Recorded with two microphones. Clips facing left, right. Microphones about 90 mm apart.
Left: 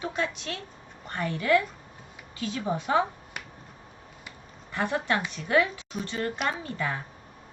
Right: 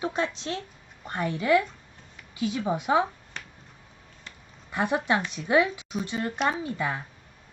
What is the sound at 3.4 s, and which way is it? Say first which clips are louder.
Finger snapping: left 1 dB; 10° left (ahead or behind).